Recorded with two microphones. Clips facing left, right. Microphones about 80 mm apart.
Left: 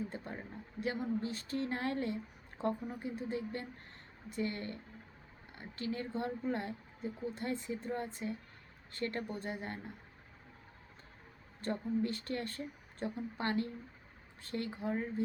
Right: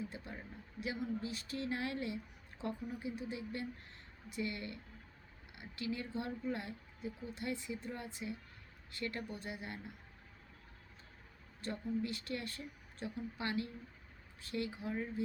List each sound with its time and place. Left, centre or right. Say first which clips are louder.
0.1 s a sound: left 5 dB; left
0.8 s speech: left 4 dB; left
11.6 s speech: left 4 dB; left